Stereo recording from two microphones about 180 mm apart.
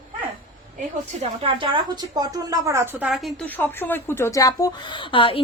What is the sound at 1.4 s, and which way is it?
Speech, 30° right (ahead or behind).